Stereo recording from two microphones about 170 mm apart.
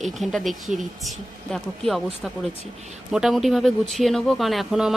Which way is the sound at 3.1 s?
Centre (ahead or behind).